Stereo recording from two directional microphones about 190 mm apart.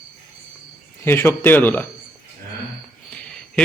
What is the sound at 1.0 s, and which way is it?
Speech, 10° left (ahead or behind).